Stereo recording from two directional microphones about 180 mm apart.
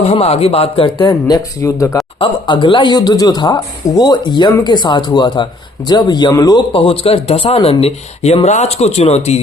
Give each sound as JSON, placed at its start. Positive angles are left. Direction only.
{"t": 0.0, "sound": "speech", "side_deg": 35}
{"t": 2.1, "sound": "speech", "side_deg": 25}